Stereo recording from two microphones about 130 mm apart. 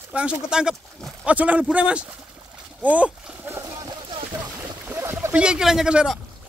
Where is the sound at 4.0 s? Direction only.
35° right (ahead or behind).